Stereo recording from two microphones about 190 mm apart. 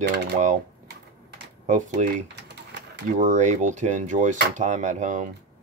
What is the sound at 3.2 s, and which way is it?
Speech, 40° right (ahead or behind).